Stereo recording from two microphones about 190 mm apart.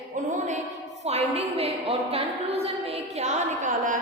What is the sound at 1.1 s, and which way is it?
A woman's voice, 35° right (ahead or behind).